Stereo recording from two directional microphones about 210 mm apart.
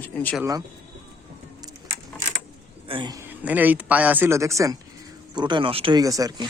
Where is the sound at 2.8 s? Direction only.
25° right (ahead or behind).